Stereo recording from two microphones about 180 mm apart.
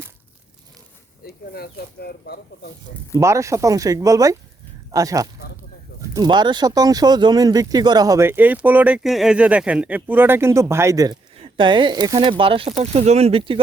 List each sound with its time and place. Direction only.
1.5 s speech: 60° left (ahead or behind)
3.2 s speech: 15° right (ahead or behind)